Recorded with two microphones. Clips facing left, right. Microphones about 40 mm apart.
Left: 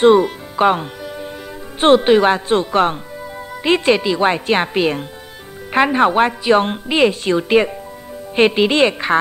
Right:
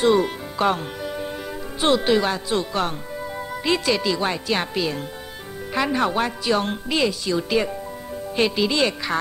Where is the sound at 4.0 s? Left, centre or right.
Left.